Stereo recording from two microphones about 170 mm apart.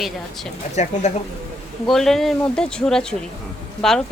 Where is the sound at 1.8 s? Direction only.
Centre (ahead or behind).